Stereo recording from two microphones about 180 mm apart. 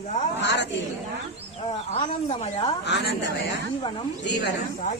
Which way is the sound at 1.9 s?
35° left (ahead or behind).